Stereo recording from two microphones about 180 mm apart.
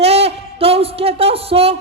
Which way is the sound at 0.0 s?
35° right (ahead or behind).